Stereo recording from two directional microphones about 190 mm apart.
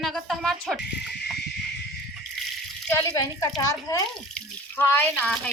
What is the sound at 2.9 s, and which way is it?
A child's voice, 15° left (ahead or behind).